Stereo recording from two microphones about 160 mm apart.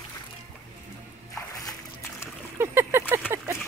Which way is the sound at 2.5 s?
15° right (ahead or behind).